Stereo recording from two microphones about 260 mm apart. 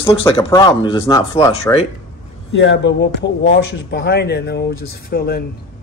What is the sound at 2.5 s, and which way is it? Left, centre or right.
Speech, left.